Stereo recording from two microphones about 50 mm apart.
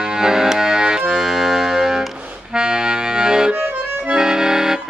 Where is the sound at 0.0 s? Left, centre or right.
Centre.